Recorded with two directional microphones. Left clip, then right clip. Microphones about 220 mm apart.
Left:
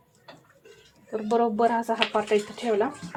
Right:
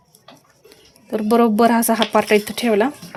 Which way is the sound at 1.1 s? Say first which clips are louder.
Right 8 dB; 55° right (ahead or behind).